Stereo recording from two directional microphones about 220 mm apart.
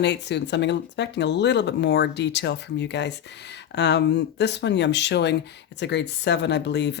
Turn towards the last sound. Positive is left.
turn(degrees=50)  # may be behind; listen again after turning